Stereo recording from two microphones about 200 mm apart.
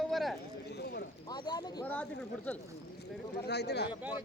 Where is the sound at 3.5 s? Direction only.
55° left (ahead or behind).